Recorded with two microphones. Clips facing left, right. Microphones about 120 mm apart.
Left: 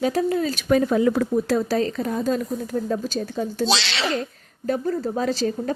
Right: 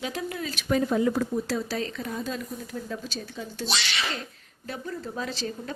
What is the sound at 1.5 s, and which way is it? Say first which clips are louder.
A woman's voice: left 8 dB; 50° left (ahead or behind).